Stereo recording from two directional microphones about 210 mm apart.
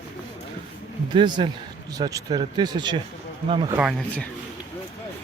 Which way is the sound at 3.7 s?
5° right (ahead or behind).